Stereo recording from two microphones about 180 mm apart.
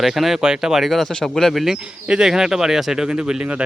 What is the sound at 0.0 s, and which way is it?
Speech, centre (ahead or behind).